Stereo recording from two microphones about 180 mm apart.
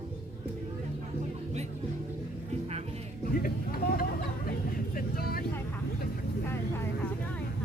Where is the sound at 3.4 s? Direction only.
55° left (ahead or behind).